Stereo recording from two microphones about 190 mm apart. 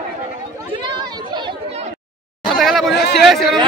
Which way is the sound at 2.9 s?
60° left (ahead or behind).